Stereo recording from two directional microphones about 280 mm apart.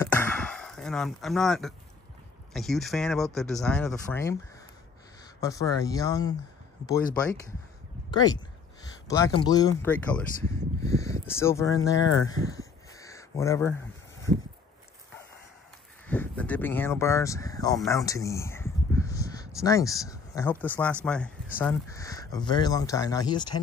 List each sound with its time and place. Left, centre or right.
0.0 s a sound: centre
2.5 s speech: centre
5.4 s speech: centre
8.1 s speech: centre
16.1 s speech: centre